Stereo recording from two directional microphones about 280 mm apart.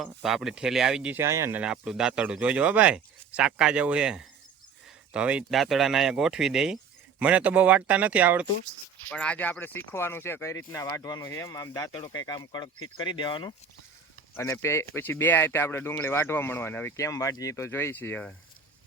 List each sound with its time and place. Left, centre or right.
0.0 s speech: centre